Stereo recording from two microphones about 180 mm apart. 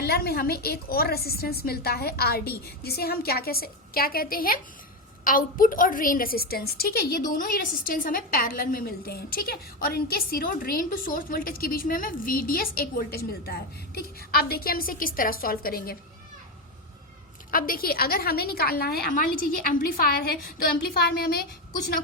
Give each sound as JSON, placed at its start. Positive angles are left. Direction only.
{"t": 0.0, "sound": "a woman's voice", "side_deg": 60}
{"t": 17.5, "sound": "a woman's voice", "side_deg": 55}